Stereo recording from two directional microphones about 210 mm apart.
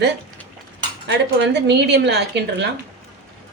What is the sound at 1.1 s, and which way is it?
Speech, 55° right (ahead or behind).